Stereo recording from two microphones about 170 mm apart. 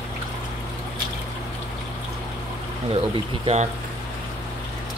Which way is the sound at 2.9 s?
30° right (ahead or behind).